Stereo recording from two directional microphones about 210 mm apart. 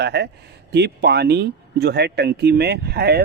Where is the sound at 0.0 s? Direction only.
55° right (ahead or behind).